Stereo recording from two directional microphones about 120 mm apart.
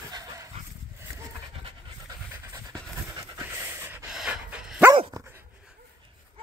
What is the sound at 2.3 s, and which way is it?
Pant, 25° right (ahead or behind).